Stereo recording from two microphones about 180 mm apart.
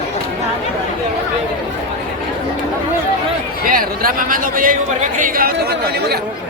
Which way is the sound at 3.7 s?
50° right (ahead or behind).